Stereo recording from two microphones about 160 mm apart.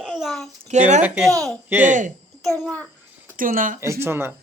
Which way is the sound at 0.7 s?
45° right (ahead or behind).